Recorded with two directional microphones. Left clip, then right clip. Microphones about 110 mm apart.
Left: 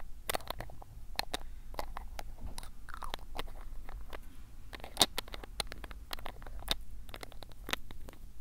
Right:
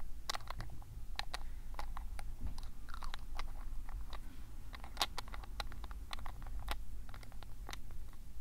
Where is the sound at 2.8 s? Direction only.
25° left (ahead or behind).